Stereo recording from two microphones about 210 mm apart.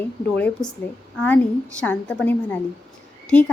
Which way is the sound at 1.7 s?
5° left (ahead or behind).